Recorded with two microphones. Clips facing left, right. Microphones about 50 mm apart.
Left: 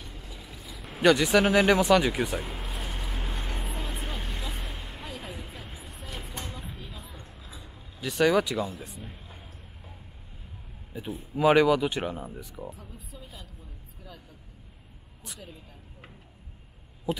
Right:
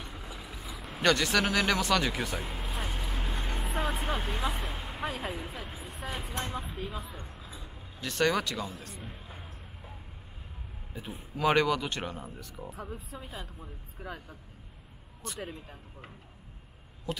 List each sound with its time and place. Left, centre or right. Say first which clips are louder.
0.0 s vehicle: right 2 dB; centre
4.3 s vehicle: right 5 dB; right
4.6 s vehicle: right 2 dB; centre
5.0 s a sound: right 7 dB; right
5.3 s a sound: right 3 dB; centre
5.6 s vehicle: right 2 dB; centre
6.0 s vehicle: right 4 dB; centre
6.6 s a sound: right 5 dB; centre
8.7 s speech: left 2 dB; centre
10.9 s speech: left 6 dB; centre
12.7 s speech: right 6 dB; right
13.2 s speech: right 4 dB; right
15.2 s speech: right 6 dB; centre
17.1 s speech: left 5 dB; centre